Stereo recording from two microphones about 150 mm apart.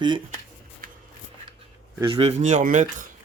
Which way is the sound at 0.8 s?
70° right (ahead or behind).